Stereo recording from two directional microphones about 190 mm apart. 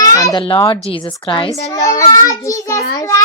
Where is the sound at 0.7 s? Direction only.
25° left (ahead or behind).